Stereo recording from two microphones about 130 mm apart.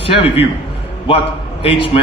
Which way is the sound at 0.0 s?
45° left (ahead or behind).